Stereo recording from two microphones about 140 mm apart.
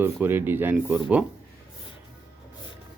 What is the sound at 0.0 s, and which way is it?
Speech, 15° right (ahead or behind).